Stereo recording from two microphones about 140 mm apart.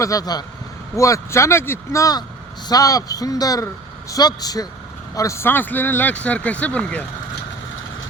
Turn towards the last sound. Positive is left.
turn(degrees=10)  # may be behind; listen again after turning